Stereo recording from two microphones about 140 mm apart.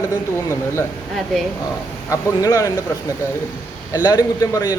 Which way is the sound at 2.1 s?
25° left (ahead or behind).